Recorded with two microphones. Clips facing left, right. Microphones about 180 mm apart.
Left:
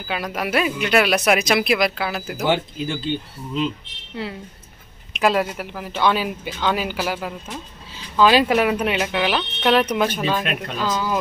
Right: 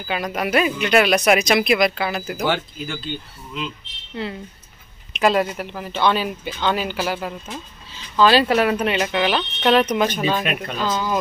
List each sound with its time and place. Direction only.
0.1 s speech: centre (ahead or behind)
2.4 s speech: 20° left (ahead or behind)
4.1 s speech: 5° left (ahead or behind)
10.2 s speech: 5° right (ahead or behind)